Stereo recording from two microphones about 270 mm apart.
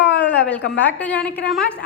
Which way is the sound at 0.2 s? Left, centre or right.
Centre.